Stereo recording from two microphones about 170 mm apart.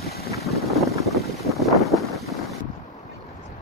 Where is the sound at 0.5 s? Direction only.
Centre (ahead or behind).